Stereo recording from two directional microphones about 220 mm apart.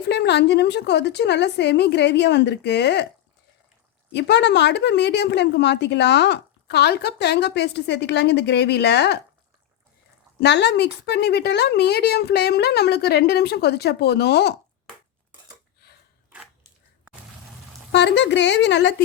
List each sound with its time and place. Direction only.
0.1 s a woman's voice: 50° left (ahead or behind)
4.1 s a woman's voice: 50° left (ahead or behind)
10.4 s a woman's voice: 50° left (ahead or behind)
15.8 s a sound: 45° left (ahead or behind)
17.9 s a woman's voice: 50° left (ahead or behind)